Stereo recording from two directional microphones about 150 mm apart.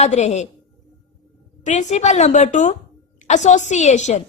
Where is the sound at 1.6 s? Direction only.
50° left (ahead or behind).